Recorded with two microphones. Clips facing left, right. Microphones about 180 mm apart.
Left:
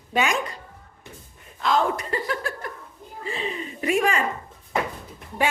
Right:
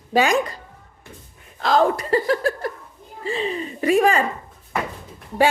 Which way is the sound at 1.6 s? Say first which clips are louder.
Right 4 dB; 35° right (ahead or behind).